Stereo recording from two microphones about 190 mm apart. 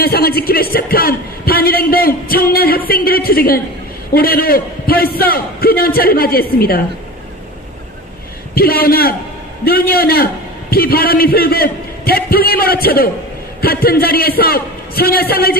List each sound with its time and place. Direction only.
0.0 s speech: 55° left (ahead or behind)
8.5 s speech: 50° left (ahead or behind)